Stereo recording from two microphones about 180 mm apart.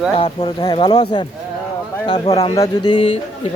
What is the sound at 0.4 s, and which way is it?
Speech, 25° left (ahead or behind).